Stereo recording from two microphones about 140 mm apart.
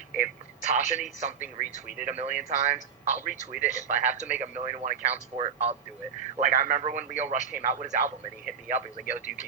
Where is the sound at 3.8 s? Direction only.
60° right (ahead or behind).